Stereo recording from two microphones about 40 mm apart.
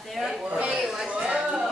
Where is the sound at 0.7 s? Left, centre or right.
Centre.